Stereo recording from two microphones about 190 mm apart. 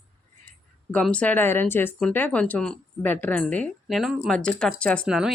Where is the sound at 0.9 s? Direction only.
5° left (ahead or behind).